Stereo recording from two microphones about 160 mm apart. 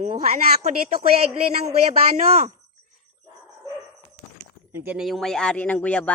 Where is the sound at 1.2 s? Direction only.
40° right (ahead or behind).